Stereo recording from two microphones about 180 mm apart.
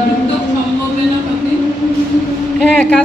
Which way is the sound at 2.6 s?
5° left (ahead or behind).